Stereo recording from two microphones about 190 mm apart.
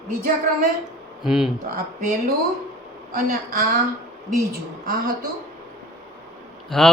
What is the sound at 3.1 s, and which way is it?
Speech, 50° right (ahead or behind).